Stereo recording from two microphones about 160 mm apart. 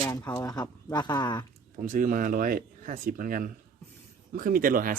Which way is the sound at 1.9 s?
60° right (ahead or behind).